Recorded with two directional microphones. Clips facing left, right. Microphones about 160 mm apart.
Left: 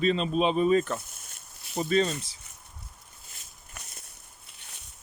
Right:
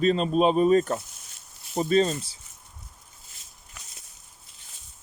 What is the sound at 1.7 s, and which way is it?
Speech, 35° right (ahead or behind).